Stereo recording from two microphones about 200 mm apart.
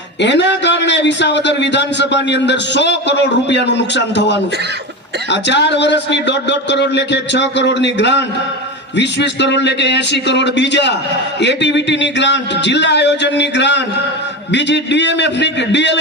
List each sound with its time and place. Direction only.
0.2 s a man's voice: 60° left (ahead or behind)